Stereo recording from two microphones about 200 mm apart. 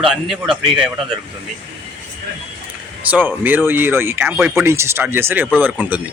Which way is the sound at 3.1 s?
10° right (ahead or behind).